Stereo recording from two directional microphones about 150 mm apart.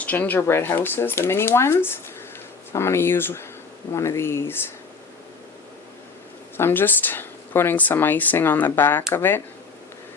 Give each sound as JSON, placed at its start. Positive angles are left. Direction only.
{"t": 0.0, "sound": "speech", "side_deg": 10}
{"t": 6.6, "sound": "speech", "side_deg": 15}